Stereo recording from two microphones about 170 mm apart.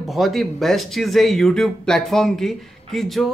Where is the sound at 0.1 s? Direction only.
Centre (ahead or behind).